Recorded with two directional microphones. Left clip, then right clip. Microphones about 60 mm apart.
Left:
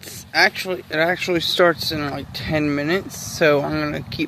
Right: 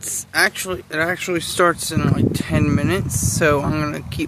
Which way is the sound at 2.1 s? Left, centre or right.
Centre.